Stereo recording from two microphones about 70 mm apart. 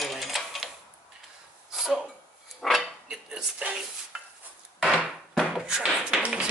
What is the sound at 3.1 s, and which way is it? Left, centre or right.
Dishes, centre.